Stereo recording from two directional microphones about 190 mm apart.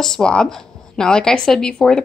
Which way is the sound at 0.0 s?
5° left (ahead or behind).